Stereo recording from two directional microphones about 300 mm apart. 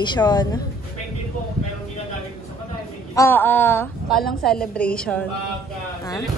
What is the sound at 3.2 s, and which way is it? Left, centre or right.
A woman's voice, centre.